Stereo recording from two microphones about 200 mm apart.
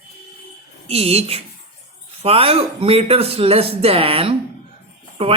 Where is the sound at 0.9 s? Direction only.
30° right (ahead or behind).